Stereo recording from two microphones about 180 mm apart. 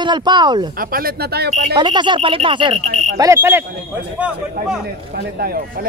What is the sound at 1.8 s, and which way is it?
Speech, 25° right (ahead or behind).